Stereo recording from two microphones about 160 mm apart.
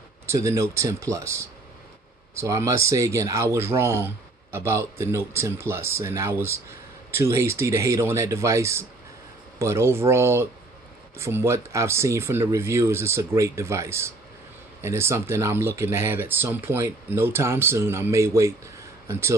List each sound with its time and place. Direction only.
0.3 s speech: 20° right (ahead or behind)